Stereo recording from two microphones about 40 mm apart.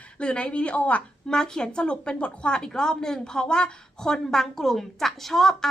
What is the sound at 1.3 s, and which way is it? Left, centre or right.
Speech, centre.